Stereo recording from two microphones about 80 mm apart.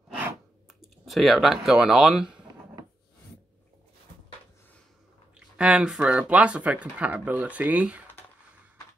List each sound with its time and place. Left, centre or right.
0.7 s speech: centre
5.6 s speech: centre